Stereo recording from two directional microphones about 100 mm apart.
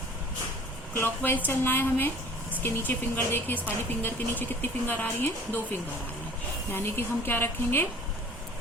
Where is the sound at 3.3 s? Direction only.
20° left (ahead or behind).